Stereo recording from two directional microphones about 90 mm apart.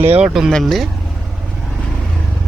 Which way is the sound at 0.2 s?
5° right (ahead or behind).